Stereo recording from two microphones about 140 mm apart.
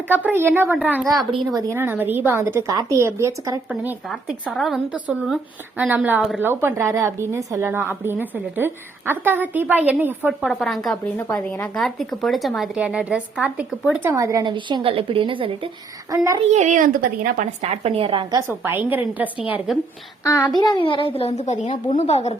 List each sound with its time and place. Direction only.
0.3 s a woman's voice: 15° right (ahead or behind)
4.1 s a woman's voice: centre (ahead or behind)
10.5 s a woman's voice: centre (ahead or behind)
14.1 s a woman's voice: 25° right (ahead or behind); by 15.7 s 40° right (ahead or behind)
16.0 s a woman's voice: 25° right (ahead or behind)
16.4 s a woman's voice: 55° right (ahead or behind); by 17.5 s 75° right (ahead or behind)
17.6 s a woman's voice: 50° right (ahead or behind)
18.3 s a woman's voice: 15° right (ahead or behind)
20.2 s a child's voice: 20° left (ahead or behind)
20.6 s a child's voice: 35° left (ahead or behind); by 22.4 s 50° left (ahead or behind)